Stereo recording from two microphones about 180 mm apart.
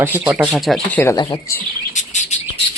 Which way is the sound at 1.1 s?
20° left (ahead or behind).